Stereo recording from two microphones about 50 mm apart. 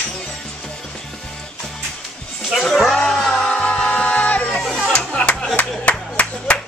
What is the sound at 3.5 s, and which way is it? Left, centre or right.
Music, left.